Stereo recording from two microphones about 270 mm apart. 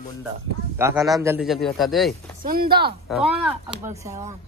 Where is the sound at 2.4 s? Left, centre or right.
Right.